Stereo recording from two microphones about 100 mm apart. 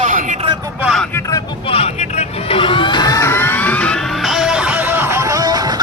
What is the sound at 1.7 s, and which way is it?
Vehicle, 90° left.